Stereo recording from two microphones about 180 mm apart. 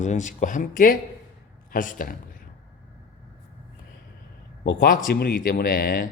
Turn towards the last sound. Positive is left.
turn(degrees=55)  # may be behind; listen again after turning